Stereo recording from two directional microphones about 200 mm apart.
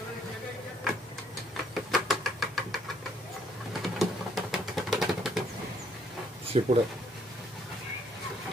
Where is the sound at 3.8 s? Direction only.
Centre (ahead or behind).